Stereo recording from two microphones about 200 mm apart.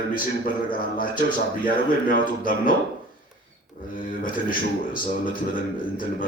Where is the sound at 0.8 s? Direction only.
45° left (ahead or behind).